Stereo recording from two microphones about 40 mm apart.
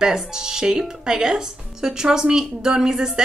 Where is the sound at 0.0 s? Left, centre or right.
Centre.